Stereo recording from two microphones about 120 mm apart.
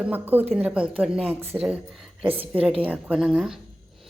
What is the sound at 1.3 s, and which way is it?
Speech, 20° right (ahead or behind).